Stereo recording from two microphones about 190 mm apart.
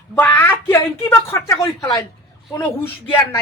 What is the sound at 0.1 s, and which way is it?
Speech, 10° left (ahead or behind).